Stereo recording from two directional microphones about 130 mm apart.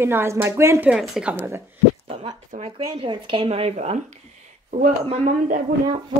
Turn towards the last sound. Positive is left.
turn(degrees=-80)